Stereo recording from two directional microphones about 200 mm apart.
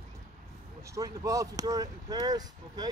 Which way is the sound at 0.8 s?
15° right (ahead or behind).